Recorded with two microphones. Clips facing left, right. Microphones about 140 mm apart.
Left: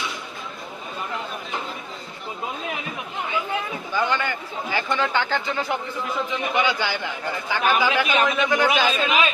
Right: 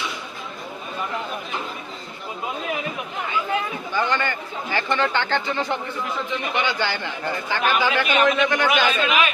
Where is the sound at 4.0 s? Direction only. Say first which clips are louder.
Even; 10° left (ahead or behind).